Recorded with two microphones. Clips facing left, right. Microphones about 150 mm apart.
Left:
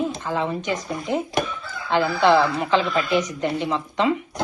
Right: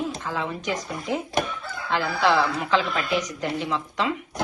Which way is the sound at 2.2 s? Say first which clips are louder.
Left 4 dB; centre (ahead or behind).